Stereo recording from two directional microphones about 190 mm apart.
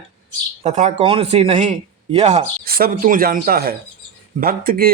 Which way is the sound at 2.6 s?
50° right (ahead or behind).